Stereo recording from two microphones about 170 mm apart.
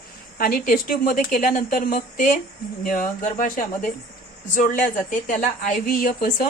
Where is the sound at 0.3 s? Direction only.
60° left (ahead or behind).